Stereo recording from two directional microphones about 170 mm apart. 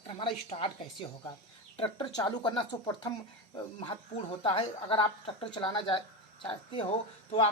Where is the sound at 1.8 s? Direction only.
30° left (ahead or behind).